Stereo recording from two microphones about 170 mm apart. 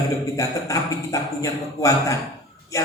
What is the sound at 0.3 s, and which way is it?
A woman's voice, 20° left (ahead or behind).